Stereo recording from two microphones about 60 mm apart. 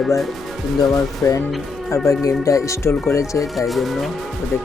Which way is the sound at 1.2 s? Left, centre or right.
Left.